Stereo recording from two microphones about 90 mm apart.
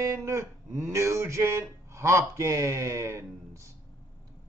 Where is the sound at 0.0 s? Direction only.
30° right (ahead or behind).